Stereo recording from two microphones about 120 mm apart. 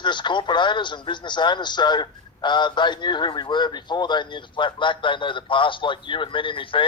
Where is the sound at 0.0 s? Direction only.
40° left (ahead or behind).